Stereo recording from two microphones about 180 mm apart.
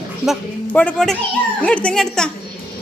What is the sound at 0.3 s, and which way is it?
A woman's voice, 10° left (ahead or behind).